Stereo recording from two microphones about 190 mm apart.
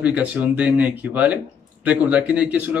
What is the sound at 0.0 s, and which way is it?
Speech, 5° right (ahead or behind).